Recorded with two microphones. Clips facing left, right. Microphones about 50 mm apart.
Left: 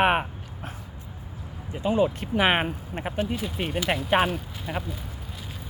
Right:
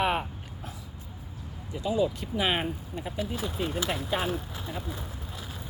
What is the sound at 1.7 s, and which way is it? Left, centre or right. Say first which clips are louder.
Speech: left 4 dB; left.